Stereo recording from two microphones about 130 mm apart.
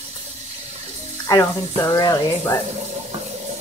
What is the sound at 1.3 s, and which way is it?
Speech, 25° left (ahead or behind).